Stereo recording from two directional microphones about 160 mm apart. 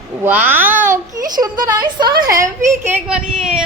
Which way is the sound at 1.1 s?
25° right (ahead or behind).